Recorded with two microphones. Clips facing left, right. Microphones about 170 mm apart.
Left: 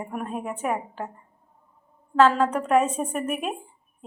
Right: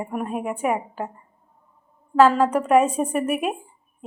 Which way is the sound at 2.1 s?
10° right (ahead or behind).